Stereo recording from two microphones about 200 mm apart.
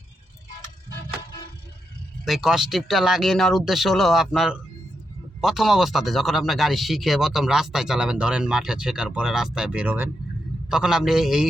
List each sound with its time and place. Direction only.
2.2 s speech: centre (ahead or behind)